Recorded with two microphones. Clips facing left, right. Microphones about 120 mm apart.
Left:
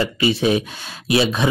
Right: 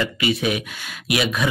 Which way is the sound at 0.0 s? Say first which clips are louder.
Left 3 dB; 30° left (ahead or behind).